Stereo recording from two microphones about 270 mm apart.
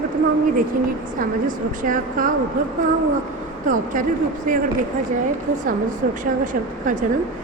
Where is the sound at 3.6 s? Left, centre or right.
Right.